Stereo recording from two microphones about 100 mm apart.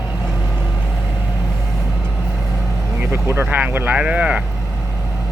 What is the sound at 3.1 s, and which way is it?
Speech, 25° right (ahead or behind).